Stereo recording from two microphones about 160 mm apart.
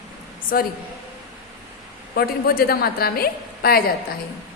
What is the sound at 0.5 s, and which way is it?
Speech, 60° left (ahead or behind).